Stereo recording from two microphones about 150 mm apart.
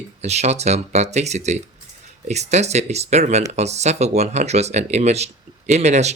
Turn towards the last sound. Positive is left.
turn(degrees=-50)  # may be behind; listen again after turning